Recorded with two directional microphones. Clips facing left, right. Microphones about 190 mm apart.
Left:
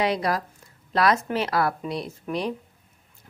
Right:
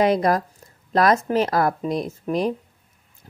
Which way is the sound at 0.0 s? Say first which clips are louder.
Right 6 dB; 45° right (ahead or behind).